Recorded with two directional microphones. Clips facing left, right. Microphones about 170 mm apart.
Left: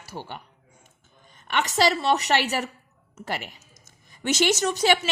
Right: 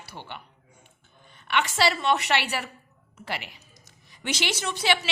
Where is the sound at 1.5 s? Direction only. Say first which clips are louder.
Left 2 dB; 40° left (ahead or behind).